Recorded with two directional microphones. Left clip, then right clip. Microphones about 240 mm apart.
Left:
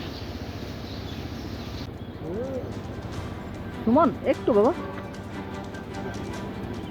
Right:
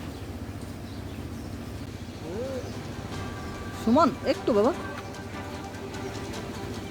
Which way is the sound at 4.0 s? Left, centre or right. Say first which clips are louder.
Left 2 dB; centre.